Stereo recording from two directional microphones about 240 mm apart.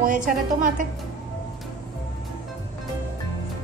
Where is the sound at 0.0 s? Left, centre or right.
Right.